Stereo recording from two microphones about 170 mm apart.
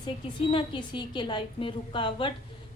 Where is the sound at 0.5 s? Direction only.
30° left (ahead or behind).